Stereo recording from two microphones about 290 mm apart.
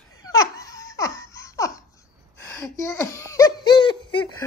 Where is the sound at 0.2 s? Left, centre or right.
Centre.